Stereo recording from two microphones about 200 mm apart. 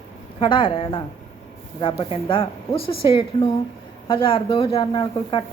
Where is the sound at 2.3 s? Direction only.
25° left (ahead or behind).